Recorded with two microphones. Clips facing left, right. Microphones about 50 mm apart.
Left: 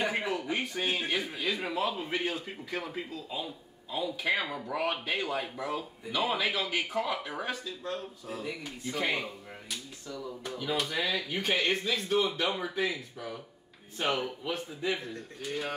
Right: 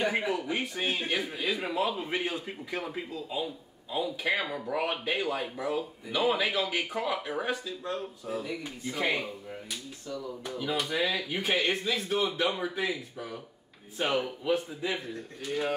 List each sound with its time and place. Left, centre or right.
0.0 s speech: centre
10.4 s speech: centre